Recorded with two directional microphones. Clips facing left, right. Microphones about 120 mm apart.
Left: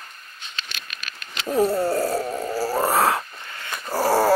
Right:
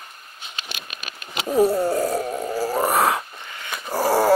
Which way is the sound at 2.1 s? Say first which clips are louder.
Right 1 dB; 10° left (ahead or behind).